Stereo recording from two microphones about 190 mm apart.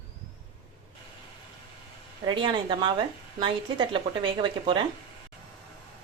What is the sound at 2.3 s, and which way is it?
Speech, 25° right (ahead or behind).